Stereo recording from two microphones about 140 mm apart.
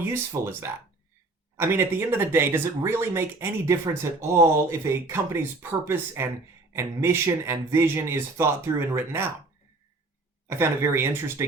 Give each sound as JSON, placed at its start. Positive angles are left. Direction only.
{"t": 0.0, "sound": "speech", "side_deg": -15}
{"t": 10.5, "sound": "speech", "side_deg": -20}